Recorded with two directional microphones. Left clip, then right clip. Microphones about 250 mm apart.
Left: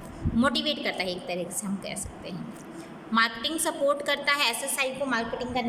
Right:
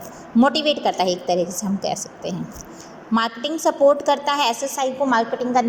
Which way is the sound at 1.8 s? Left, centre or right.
Centre.